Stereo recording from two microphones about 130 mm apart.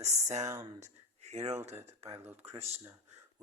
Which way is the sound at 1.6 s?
55° right (ahead or behind).